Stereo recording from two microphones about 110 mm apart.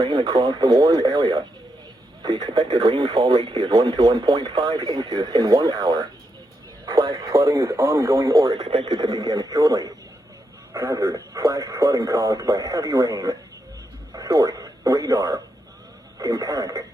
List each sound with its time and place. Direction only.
0.3 s speech: 45° right (ahead or behind)
7.2 s speech: 30° right (ahead or behind)
8.4 s speech: 40° right (ahead or behind)
9.0 s speech: 35° right (ahead or behind)